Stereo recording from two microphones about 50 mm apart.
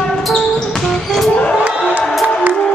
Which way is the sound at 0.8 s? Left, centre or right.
Centre.